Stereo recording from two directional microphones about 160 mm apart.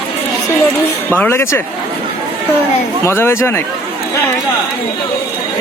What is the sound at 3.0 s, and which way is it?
Speech, 15° left (ahead or behind).